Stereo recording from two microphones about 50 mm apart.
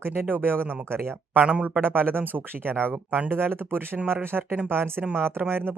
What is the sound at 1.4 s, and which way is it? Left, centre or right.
Speech, right.